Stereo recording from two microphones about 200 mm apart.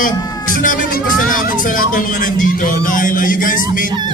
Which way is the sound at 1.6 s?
45° left (ahead or behind).